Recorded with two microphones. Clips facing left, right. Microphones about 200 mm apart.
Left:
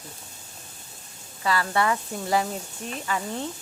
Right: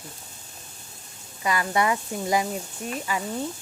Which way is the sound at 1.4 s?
15° right (ahead or behind).